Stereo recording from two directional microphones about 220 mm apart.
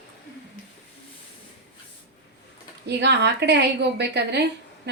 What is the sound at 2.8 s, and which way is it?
A woman's voice, 50° right (ahead or behind).